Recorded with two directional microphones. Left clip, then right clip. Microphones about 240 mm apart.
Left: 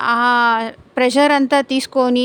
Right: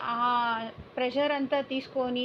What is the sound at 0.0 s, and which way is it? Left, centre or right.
A woman's voice, left.